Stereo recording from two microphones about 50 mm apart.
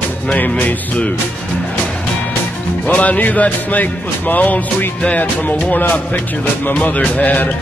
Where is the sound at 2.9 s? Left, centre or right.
Left.